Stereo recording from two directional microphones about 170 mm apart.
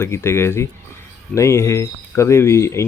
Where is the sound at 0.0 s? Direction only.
15° left (ahead or behind).